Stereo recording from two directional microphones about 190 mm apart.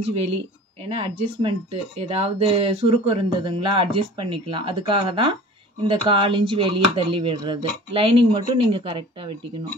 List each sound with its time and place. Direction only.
0.0 s speech: 35° right (ahead or behind)